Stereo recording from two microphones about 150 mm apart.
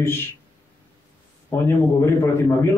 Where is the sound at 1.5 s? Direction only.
15° left (ahead or behind).